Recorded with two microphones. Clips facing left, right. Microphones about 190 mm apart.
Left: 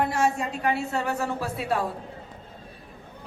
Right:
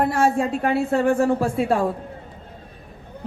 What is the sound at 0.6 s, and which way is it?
A woman's voice, 55° right (ahead or behind).